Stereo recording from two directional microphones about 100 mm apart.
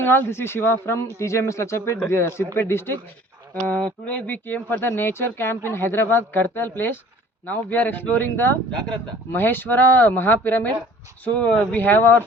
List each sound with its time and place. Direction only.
0.0 s speech: 25° left (ahead or behind)